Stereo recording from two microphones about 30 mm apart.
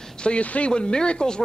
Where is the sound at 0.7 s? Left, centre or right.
Left.